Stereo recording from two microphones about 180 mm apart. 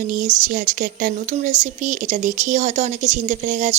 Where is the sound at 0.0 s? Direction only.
45° right (ahead or behind).